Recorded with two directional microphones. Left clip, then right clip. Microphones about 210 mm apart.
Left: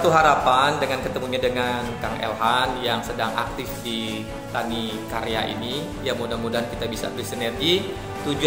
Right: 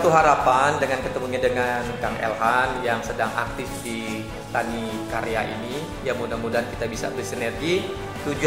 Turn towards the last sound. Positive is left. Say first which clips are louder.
# left 2 dB
turn(degrees=30)  # may be behind; listen again after turning